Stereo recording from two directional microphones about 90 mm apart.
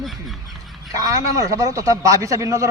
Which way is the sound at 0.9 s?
40° right (ahead or behind).